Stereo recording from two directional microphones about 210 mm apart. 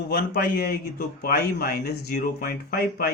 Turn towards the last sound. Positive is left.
turn(degrees=45)  # may be behind; listen again after turning